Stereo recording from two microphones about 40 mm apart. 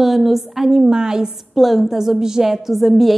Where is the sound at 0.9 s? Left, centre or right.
Centre.